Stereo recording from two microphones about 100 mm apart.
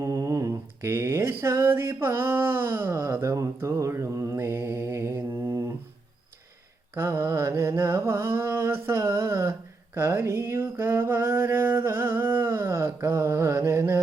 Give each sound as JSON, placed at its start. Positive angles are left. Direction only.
{"t": 0.0, "sound": "mantra", "side_deg": -30}
{"t": 6.9, "sound": "mantra", "side_deg": -20}